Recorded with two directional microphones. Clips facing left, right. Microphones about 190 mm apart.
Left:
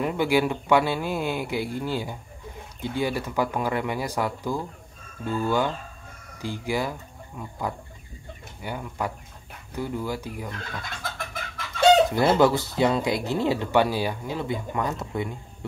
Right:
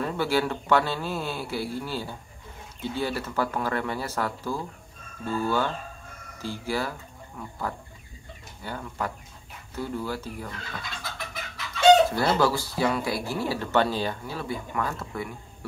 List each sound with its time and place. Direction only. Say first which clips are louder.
0.0 s speech: left 3 dB; 15° left (ahead or behind)
10.6 s chicken: left 3 dB; 50° left (ahead or behind)
12.1 s speech: left 4 dB; 20° left (ahead or behind)